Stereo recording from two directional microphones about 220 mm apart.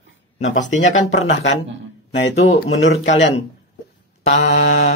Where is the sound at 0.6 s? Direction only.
35° left (ahead or behind).